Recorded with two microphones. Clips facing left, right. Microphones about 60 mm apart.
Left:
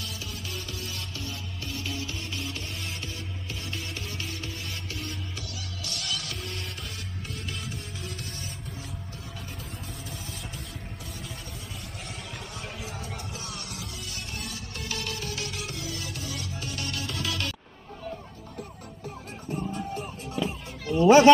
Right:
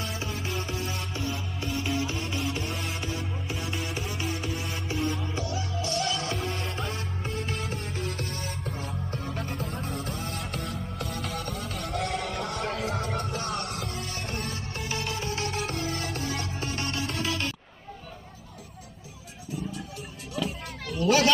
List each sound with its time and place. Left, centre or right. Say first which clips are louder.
0.0 s music: right 5 dB; right
5.3 s music: right 8 dB; right
7.3 s music: right 5 dB; right
14.3 s music: right 4 dB; right
14.8 s music: right 2 dB; right
19.5 s music: left 4 dB; left
20.4 s music: left 2 dB; left